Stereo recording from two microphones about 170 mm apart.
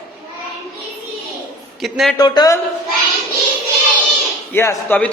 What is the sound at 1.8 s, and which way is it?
Speech, centre (ahead or behind).